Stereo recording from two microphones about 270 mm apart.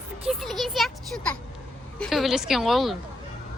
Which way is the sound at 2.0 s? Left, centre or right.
Centre.